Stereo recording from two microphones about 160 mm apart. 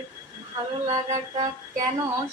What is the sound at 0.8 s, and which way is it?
Music, 45° right (ahead or behind).